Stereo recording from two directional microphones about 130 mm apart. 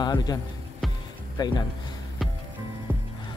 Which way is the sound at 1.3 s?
35° left (ahead or behind).